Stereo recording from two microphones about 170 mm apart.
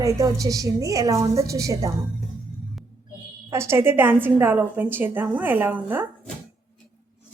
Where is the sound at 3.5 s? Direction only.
15° right (ahead or behind).